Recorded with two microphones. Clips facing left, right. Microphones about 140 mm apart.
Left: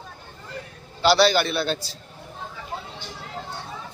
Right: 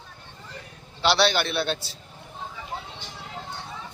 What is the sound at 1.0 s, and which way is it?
Speech, centre (ahead or behind).